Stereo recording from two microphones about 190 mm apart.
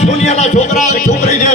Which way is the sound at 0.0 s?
35° left (ahead or behind).